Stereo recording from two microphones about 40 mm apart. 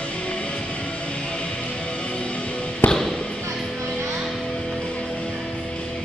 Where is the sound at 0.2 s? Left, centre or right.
Left.